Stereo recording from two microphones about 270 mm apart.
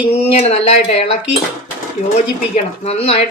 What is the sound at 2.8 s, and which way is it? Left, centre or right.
Speech, left.